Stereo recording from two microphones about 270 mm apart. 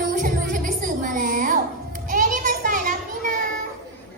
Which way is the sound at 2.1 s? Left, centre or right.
Right.